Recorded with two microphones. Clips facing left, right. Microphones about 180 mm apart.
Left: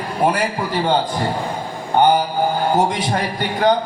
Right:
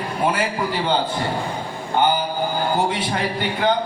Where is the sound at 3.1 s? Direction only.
45° left (ahead or behind).